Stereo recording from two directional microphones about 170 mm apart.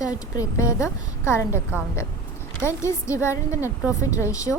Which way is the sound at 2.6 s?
15° left (ahead or behind).